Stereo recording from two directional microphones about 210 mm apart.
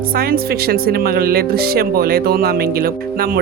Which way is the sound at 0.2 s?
45° right (ahead or behind).